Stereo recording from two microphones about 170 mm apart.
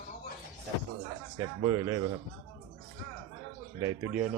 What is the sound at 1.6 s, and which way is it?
Speech, 20° right (ahead or behind).